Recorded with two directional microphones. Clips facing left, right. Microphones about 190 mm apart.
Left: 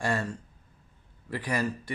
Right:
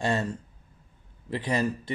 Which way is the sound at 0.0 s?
20° right (ahead or behind).